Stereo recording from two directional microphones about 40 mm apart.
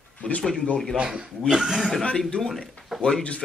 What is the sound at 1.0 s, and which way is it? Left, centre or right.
Speech, right.